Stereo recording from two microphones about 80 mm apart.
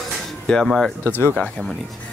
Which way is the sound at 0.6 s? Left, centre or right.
Centre.